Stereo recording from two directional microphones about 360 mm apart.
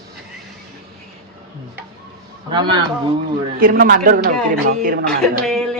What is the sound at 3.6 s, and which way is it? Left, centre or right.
Speech, right.